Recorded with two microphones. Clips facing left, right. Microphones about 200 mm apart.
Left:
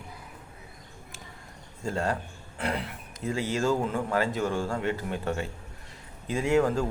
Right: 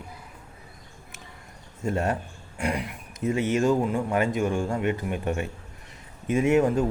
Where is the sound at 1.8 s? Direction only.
20° right (ahead or behind).